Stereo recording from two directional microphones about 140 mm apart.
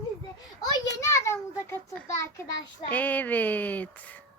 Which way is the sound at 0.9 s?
20° left (ahead or behind).